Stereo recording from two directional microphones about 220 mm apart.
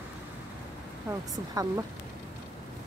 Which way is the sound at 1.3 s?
15° right (ahead or behind).